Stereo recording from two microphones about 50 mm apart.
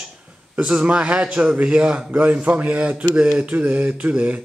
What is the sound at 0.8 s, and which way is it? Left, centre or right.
A man's voice, right.